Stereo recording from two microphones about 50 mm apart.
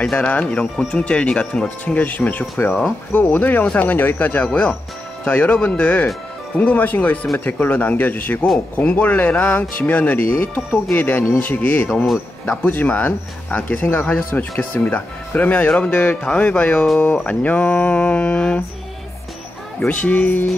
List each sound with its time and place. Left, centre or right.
0.0 s speech: left
10.7 s speech: left
19.9 s speech: left